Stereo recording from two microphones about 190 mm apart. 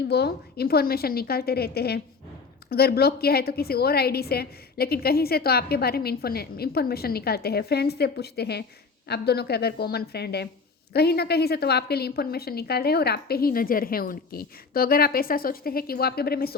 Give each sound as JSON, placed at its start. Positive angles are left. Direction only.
{"t": 0.1, "sound": "a woman's voice", "side_deg": 60}